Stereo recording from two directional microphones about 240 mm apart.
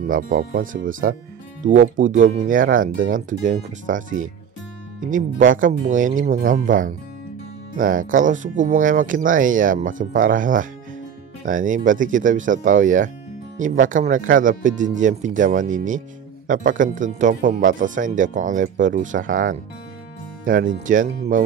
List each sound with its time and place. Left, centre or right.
0.0 s speech: right